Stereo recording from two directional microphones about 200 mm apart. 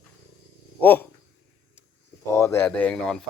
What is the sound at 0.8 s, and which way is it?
Speech, 10° left (ahead or behind).